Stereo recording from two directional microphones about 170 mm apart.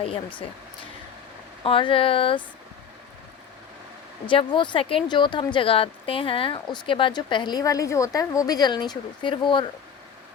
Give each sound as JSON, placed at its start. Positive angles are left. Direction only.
{"t": 0.0, "sound": "speech", "side_deg": 30}
{"t": 4.3, "sound": "speech", "side_deg": 30}